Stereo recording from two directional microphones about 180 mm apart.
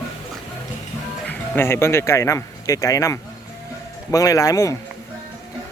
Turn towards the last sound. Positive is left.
turn(degrees=20)  # may be behind; listen again after turning